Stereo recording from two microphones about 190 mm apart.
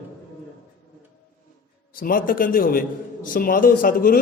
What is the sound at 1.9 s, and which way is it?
A man's voice, 50° left (ahead or behind).